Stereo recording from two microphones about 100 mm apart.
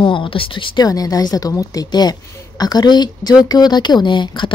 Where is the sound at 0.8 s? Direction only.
40° left (ahead or behind).